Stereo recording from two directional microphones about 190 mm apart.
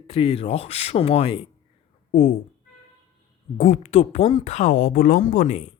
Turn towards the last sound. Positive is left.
turn(degrees=40)  # may be behind; listen again after turning